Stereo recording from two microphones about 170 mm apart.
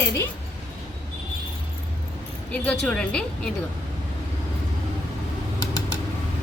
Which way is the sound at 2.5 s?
10° left (ahead or behind).